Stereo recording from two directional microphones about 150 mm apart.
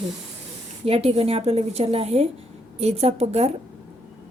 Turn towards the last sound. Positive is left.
turn(degrees=-45)  # may be behind; listen again after turning